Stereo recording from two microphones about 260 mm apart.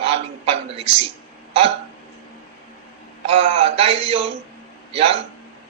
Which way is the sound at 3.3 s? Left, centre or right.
Right.